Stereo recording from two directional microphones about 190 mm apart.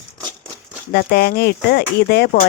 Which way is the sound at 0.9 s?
55° left (ahead or behind).